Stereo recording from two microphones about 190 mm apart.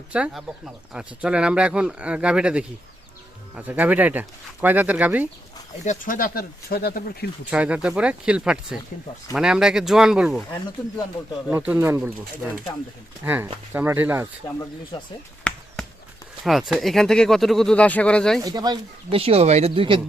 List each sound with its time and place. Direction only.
0.1 s speech: 5° right (ahead or behind)
5.8 s speech: 45° left (ahead or behind)
7.5 s speech: 5° right (ahead or behind)
11.5 s speech: 10° right (ahead or behind)
13.2 s speech: 10° right (ahead or behind)
14.4 s speech: 20° left (ahead or behind)
15.4 s basketball bounce: 5° left (ahead or behind)
16.4 s speech: centre (ahead or behind)
18.4 s speech: 20° right (ahead or behind)